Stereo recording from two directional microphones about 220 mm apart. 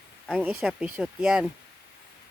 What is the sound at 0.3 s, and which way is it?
Speech, 5° right (ahead or behind).